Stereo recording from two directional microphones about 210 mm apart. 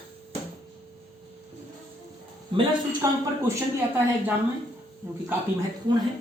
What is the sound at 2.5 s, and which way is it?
Speech, 25° right (ahead or behind).